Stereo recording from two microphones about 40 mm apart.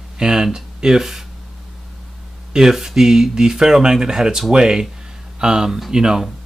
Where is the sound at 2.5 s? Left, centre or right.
Centre.